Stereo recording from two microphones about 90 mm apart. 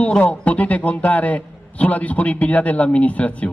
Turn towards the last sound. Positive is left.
turn(degrees=15)  # may be behind; listen again after turning